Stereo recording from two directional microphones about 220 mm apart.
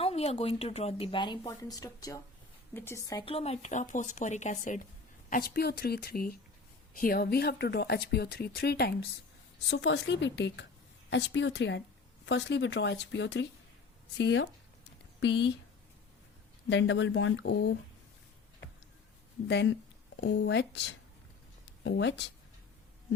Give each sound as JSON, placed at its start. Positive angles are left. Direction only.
{"t": 0.0, "sound": "speech", "side_deg": 30}
{"t": 16.6, "sound": "speech", "side_deg": 55}
{"t": 19.5, "sound": "speech", "side_deg": 50}
{"t": 21.8, "sound": "speech", "side_deg": 55}